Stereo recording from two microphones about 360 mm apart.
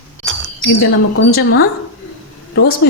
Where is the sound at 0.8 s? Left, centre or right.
Left.